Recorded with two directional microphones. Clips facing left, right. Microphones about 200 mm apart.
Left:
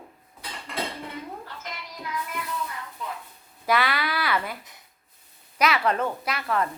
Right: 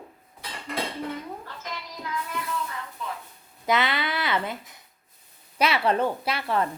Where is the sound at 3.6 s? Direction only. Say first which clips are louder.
Even; 20° right (ahead or behind).